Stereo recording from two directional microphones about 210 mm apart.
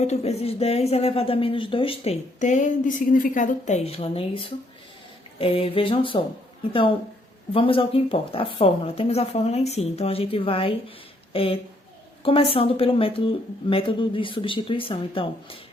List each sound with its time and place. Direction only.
0.0 s speech: 30° left (ahead or behind)
7.5 s speech: 25° left (ahead or behind)